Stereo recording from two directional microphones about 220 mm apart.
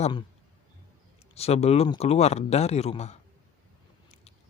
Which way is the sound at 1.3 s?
30° left (ahead or behind).